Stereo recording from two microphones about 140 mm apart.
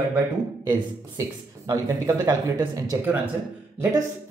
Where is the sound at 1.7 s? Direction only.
25° right (ahead or behind).